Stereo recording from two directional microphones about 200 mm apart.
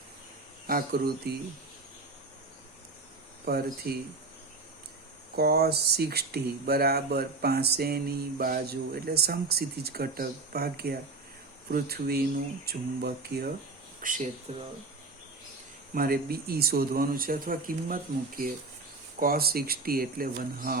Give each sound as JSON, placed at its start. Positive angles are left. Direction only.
{"t": 0.7, "sound": "speech", "side_deg": -50}
{"t": 3.4, "sound": "speech", "side_deg": -50}
{"t": 5.4, "sound": "speech", "side_deg": -50}
{"t": 14.0, "sound": "speech", "side_deg": -40}
{"t": 16.0, "sound": "speech", "side_deg": -50}